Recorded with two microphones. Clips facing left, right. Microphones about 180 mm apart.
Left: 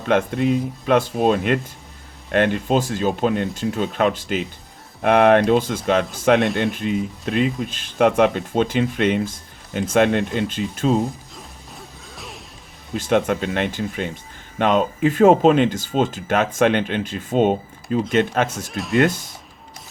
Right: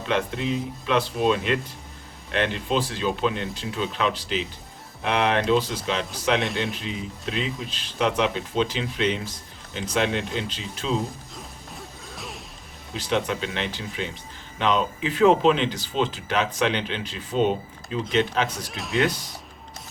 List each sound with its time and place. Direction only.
0.1 s speech: 50° left (ahead or behind)
11.7 s music: centre (ahead or behind)
12.9 s speech: 50° left (ahead or behind)
18.7 s speech: centre (ahead or behind)
18.9 s speech: 50° left (ahead or behind)